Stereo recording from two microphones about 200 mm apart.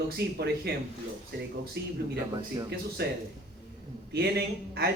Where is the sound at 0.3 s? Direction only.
55° right (ahead or behind).